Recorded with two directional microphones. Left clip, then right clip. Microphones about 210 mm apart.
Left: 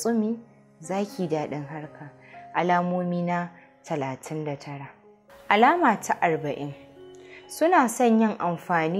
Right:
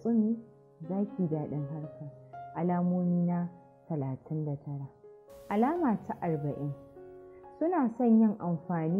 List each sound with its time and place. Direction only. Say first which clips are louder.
0.0 s a woman's voice: left 5 dB; 20° left (ahead or behind)